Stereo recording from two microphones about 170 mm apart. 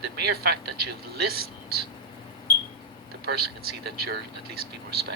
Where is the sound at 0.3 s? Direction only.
70° right (ahead or behind).